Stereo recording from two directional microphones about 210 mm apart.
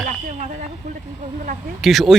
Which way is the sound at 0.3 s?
35° right (ahead or behind).